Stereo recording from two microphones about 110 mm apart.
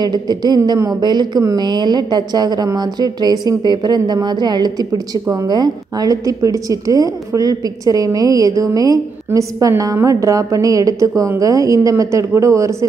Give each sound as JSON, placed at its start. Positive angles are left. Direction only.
{"t": 0.0, "sound": "a woman's voice", "side_deg": -40}